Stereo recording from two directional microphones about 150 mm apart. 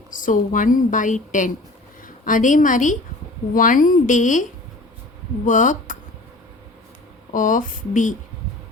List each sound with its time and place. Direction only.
0.1 s a woman's voice: 60° left (ahead or behind)
5.5 s a woman's voice: 55° left (ahead or behind)
7.3 s a woman's voice: 60° left (ahead or behind)